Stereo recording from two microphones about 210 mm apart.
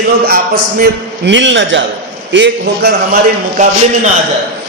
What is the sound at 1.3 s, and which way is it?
A man's voice, 60° right (ahead or behind).